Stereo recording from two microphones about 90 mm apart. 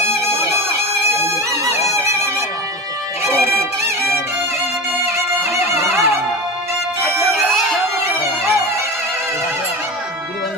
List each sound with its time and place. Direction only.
1.2 s music: 30° right (ahead or behind)
5.0 s music: 30° right (ahead or behind)
8.2 s music: 30° right (ahead or behind)